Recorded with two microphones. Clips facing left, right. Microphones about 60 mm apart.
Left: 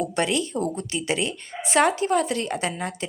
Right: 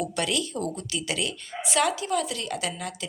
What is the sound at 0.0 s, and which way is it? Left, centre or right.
A woman's voice, left.